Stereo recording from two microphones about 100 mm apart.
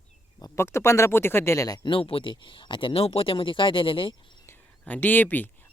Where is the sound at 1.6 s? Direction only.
40° left (ahead or behind).